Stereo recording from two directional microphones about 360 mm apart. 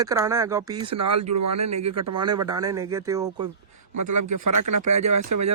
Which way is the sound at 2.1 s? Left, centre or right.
Centre.